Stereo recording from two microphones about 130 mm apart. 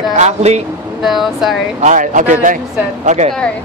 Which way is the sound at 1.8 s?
75° right (ahead or behind).